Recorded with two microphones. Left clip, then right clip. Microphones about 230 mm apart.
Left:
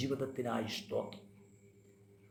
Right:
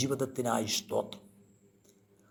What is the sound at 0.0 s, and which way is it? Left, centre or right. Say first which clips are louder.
A man's voice: right 5 dB; right.